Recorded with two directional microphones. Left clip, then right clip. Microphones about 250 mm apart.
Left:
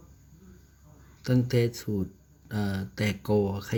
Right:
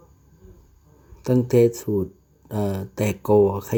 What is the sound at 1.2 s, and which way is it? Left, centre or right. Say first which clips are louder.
Speech: right 9 dB; centre.